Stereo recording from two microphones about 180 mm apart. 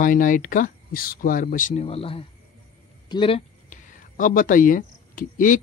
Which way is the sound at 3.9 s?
45° left (ahead or behind).